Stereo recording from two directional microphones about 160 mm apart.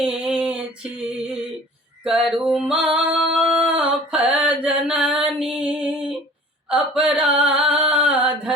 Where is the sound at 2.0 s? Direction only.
5° right (ahead or behind).